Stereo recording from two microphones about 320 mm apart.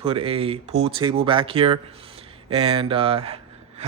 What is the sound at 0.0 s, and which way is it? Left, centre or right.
Speech, centre.